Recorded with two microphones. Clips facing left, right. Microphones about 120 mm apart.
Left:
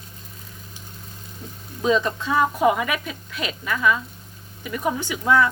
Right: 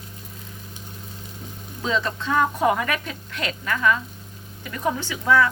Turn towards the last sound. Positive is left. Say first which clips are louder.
# even
turn(degrees=20)  # may be behind; listen again after turning